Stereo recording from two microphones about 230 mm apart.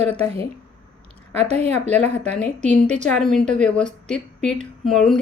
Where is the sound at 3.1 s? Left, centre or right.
Centre.